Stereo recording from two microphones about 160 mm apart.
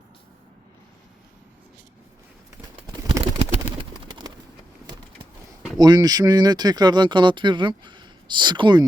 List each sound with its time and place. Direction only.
2.8 s bird: 20° right (ahead or behind)
5.7 s speech: 25° right (ahead or behind)